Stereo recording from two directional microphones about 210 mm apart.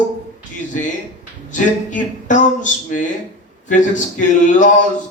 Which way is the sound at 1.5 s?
35° left (ahead or behind).